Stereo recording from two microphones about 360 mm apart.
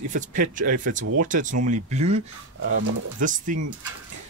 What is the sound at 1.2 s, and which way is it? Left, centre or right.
Speech, right.